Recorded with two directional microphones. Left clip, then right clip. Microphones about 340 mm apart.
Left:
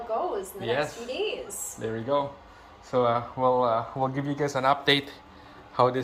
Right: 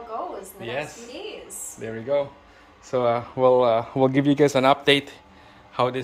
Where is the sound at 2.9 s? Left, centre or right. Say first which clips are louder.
Right 2 dB; centre.